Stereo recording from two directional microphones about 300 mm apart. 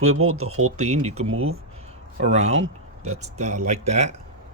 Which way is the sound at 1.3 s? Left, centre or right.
Right.